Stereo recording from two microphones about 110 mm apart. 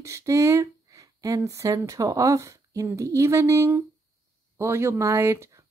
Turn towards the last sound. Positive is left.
turn(degrees=-25)  # may be behind; listen again after turning